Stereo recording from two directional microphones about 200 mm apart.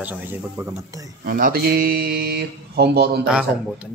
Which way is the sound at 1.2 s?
45° right (ahead or behind).